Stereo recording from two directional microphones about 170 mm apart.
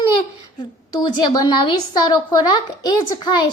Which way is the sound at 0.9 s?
25° left (ahead or behind).